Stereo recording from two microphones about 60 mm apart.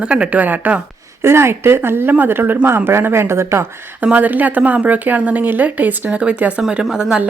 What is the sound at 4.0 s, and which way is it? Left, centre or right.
A woman's voice, right.